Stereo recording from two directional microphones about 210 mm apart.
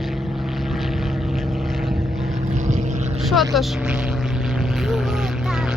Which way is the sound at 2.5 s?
35° right (ahead or behind).